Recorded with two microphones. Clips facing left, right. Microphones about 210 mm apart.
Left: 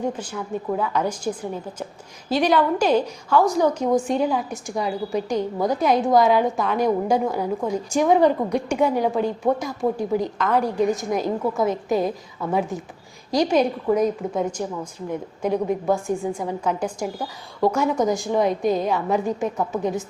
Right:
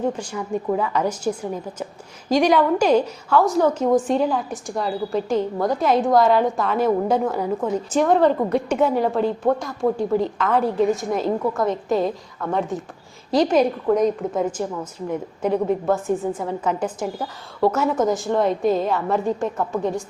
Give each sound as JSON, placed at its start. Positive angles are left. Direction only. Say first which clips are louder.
{"t": 0.1, "sound": "a woman's voice", "louder": "right 2 dB", "side_deg": 5}
{"t": 2.4, "sound": "a woman's voice", "louder": "right 1 dB", "side_deg": 5}
{"t": 8.4, "sound": "a woman's voice", "louder": "right 1 dB", "side_deg": -5}
{"t": 16.0, "sound": "a woman's voice", "louder": "right 2 dB", "side_deg": -5}
{"t": 17.0, "sound": "a woman's voice", "louder": "right 1 dB", "side_deg": -5}